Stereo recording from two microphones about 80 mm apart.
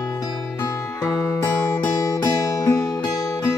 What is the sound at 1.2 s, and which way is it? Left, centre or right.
Music, left.